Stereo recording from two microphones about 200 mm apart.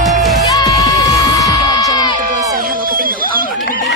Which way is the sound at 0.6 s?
20° left (ahead or behind).